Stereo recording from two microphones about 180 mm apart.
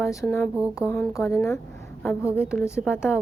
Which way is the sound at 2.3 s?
5° right (ahead or behind).